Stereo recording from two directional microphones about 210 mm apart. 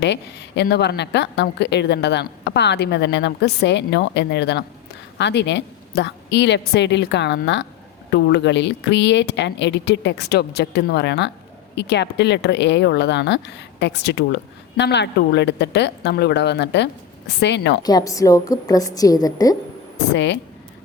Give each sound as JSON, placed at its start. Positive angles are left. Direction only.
{"t": 0.0, "sound": "speech", "side_deg": 55}
{"t": 17.8, "sound": "a woman's voice", "side_deg": 15}
{"t": 20.1, "sound": "speech", "side_deg": 55}